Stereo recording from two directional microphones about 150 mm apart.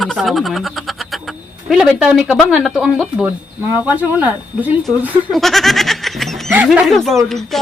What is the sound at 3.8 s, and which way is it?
Speech, 10° right (ahead or behind).